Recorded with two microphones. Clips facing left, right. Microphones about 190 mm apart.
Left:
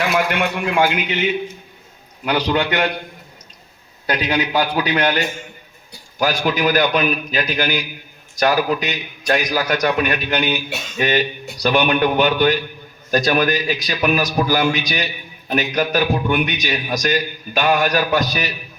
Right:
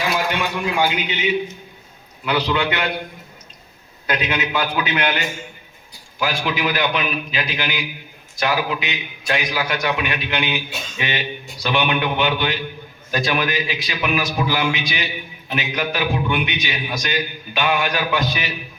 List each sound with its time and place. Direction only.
0.3 s a man's voice: 60° left (ahead or behind)
2.2 s a man's voice: 45° left (ahead or behind)
4.0 s a man's voice: 35° left (ahead or behind)